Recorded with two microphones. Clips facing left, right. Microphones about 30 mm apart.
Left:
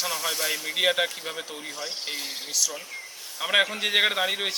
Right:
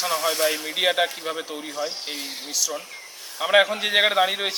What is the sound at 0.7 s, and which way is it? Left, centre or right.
Speech, centre.